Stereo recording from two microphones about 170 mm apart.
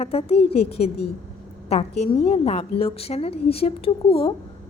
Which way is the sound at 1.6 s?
40° left (ahead or behind).